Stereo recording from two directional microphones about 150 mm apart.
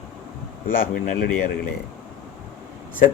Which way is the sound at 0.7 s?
70° left (ahead or behind).